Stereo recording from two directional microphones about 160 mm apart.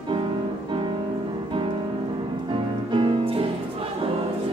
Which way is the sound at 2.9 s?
35° right (ahead or behind).